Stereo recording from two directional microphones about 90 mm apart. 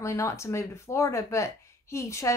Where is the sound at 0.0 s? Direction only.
35° left (ahead or behind).